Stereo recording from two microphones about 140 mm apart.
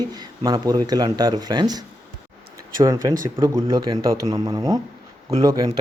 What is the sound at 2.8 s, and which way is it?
Speech, 25° right (ahead or behind).